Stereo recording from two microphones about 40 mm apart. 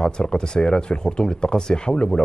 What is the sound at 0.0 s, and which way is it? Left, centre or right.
Speech, centre.